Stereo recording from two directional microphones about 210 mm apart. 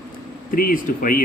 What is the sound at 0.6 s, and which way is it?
Speech, 40° left (ahead or behind).